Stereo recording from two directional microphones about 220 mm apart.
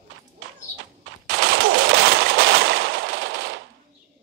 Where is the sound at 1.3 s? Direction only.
65° right (ahead or behind).